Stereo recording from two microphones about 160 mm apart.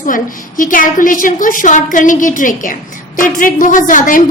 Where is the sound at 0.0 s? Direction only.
55° left (ahead or behind).